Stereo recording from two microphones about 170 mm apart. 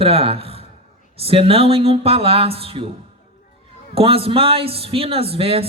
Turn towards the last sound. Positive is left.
turn(degrees=-35)  # may be behind; listen again after turning